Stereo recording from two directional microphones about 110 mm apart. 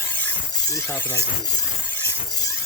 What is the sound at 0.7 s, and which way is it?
Speech, 25° left (ahead or behind).